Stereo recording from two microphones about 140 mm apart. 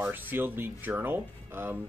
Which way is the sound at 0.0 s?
15° right (ahead or behind).